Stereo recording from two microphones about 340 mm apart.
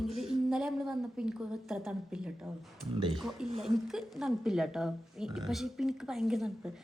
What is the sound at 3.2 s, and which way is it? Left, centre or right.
A woman's voice, centre.